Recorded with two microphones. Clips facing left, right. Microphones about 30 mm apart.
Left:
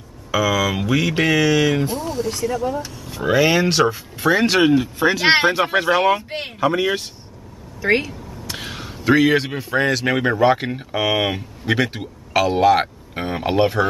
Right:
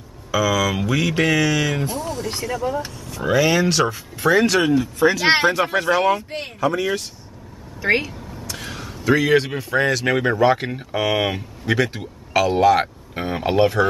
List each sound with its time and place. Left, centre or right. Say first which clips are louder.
0.3 s mantra: left 1 dB; centre
2.4 s speech: even; centre
3.2 s speech: left 1 dB; centre
4.5 s speech: left 2 dB; left
6.1 s speech: left 2 dB; left
7.8 s speech: left 1 dB; centre
8.6 s speech: left 1 dB; left